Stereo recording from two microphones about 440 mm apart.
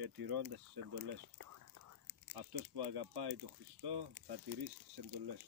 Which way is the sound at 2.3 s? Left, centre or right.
Right.